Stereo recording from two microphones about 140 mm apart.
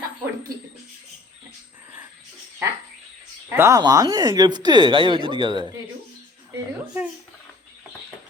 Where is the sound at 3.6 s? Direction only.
25° right (ahead or behind).